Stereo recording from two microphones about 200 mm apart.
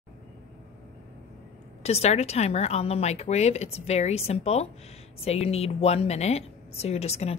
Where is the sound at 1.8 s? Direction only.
30° left (ahead or behind).